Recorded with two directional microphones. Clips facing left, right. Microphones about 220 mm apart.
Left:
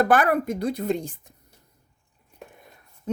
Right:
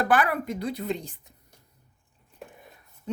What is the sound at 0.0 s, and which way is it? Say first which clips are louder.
Speech: left 4 dB; 45° left (ahead or behind).